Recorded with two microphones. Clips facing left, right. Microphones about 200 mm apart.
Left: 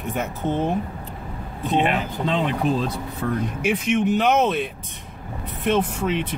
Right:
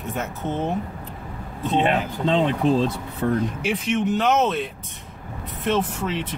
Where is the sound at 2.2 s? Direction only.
30° right (ahead or behind).